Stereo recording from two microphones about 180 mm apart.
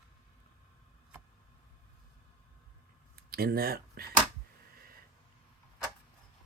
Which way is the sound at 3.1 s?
60° right (ahead or behind).